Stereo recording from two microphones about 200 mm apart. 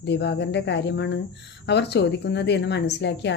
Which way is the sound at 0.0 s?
60° left (ahead or behind).